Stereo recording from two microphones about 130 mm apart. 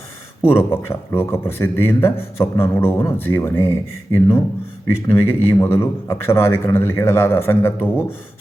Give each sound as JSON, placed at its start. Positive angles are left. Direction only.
{"t": 0.4, "sound": "a man's voice", "side_deg": 20}